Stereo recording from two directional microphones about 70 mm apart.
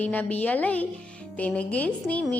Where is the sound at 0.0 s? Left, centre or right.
Left.